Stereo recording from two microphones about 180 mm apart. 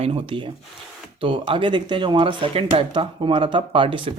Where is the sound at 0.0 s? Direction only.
30° right (ahead or behind).